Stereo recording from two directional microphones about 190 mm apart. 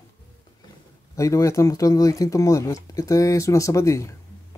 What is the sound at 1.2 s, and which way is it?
Speech, 15° left (ahead or behind).